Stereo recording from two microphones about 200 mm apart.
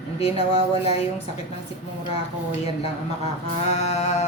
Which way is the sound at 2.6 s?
30° left (ahead or behind).